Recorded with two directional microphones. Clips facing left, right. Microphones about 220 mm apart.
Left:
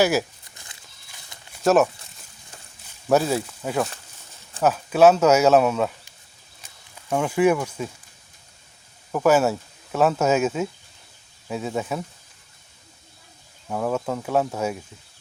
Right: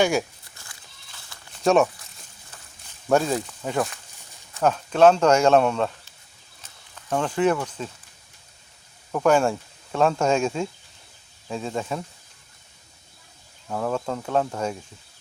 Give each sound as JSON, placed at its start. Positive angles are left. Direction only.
{"t": 0.0, "sound": "speech", "side_deg": 5}
{"t": 0.5, "sound": "livestock", "side_deg": 20}
{"t": 1.6, "sound": "speech", "side_deg": 5}
{"t": 3.1, "sound": "speech", "side_deg": 5}
{"t": 6.6, "sound": "a sound", "side_deg": 10}
{"t": 9.1, "sound": "speech", "side_deg": 5}
{"t": 13.7, "sound": "speech", "side_deg": 5}